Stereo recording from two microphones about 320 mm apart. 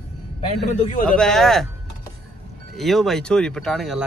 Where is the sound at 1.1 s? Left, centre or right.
Centre.